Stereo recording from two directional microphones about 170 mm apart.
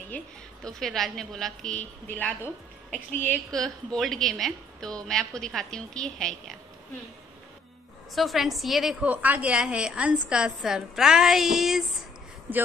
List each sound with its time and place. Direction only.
0.7 s a woman's voice: centre (ahead or behind)
8.1 s a woman's voice: centre (ahead or behind)